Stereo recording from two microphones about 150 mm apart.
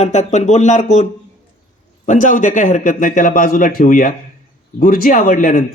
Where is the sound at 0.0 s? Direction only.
50° left (ahead or behind).